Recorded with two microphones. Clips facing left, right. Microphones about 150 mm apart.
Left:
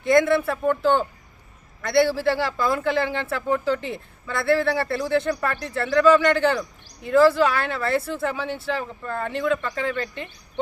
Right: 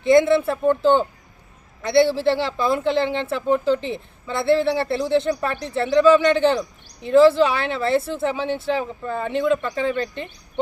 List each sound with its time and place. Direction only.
0.0 s speech: 25° right (ahead or behind)